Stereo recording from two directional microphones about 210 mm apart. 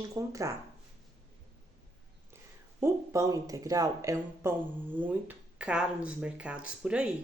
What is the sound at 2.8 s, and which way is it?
A woman's voice, 15° right (ahead or behind).